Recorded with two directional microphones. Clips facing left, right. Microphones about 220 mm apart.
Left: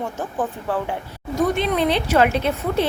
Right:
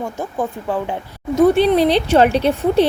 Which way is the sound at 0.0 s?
10° right (ahead or behind).